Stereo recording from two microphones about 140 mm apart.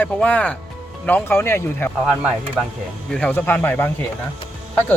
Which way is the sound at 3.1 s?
10° left (ahead or behind).